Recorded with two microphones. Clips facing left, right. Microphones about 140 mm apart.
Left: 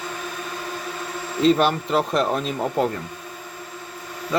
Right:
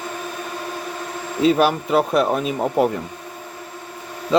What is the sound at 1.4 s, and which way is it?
Speech, 5° right (ahead or behind).